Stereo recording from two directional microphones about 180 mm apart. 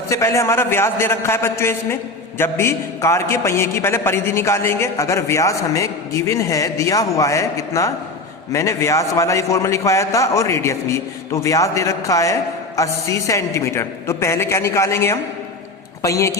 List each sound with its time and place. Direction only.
0.1 s a man's voice: 15° left (ahead or behind)